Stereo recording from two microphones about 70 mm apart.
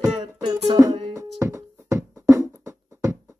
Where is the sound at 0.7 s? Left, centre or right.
Right.